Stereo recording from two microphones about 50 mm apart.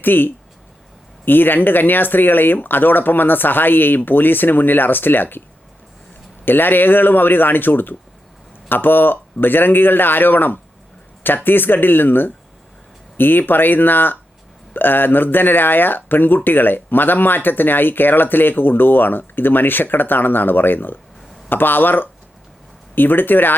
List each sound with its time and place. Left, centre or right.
0.0 s speech: left
6.4 s speech: left